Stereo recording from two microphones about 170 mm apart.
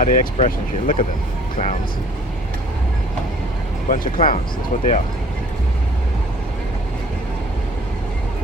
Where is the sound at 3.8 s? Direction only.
55° left (ahead or behind).